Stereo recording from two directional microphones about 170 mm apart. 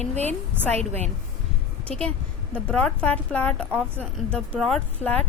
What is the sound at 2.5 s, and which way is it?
A woman's voice, 5° left (ahead or behind).